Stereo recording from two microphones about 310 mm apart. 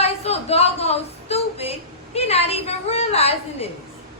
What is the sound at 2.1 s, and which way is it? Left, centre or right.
A woman's voice, centre.